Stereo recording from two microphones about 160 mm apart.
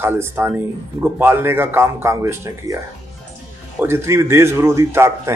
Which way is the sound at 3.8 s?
15° right (ahead or behind).